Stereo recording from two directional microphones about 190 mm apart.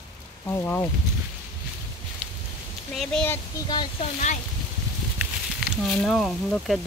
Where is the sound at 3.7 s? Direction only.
25° left (ahead or behind).